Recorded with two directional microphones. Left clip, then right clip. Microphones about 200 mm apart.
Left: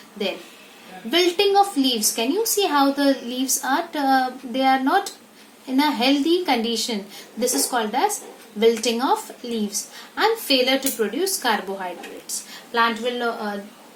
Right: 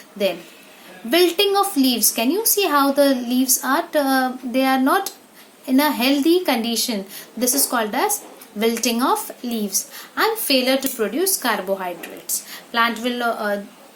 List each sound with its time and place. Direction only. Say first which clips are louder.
1.1 s a woman's voice: right 1 dB; 40° right (ahead or behind)